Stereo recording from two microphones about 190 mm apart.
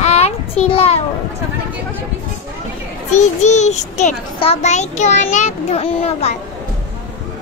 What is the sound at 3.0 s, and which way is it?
A child's voice, 35° left (ahead or behind).